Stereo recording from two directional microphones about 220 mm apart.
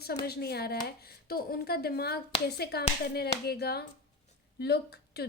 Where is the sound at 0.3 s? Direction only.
45° left (ahead or behind).